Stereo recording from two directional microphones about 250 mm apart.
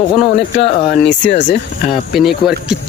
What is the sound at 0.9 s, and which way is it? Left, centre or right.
Speech, left.